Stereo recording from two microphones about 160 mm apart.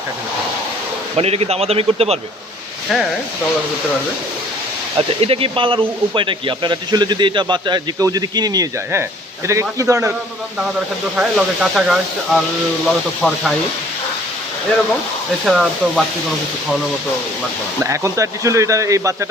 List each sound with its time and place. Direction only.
1.1 s a man's voice: 40° right (ahead or behind)
4.9 s speech: 35° right (ahead or behind); by 10.2 s 20° right (ahead or behind)
11.2 s speech: centre (ahead or behind)
13.2 s speech: 15° left (ahead or behind)
15.4 s speech: centre (ahead or behind)
17.8 s speech: 20° right (ahead or behind)